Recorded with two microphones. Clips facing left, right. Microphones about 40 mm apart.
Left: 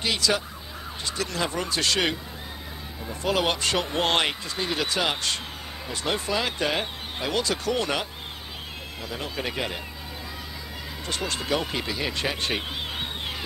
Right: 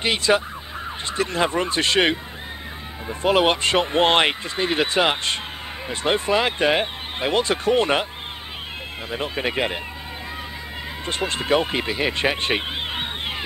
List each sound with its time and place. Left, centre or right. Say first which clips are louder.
0.0 s speech: right 5 dB; right
9.1 s speech: right 6 dB; right
11.1 s speech: right 6 dB; right